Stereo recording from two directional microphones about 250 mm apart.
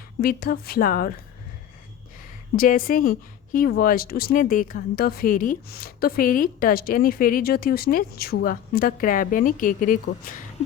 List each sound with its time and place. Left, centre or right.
0.2 s a woman's voice: left
2.6 s a woman's voice: left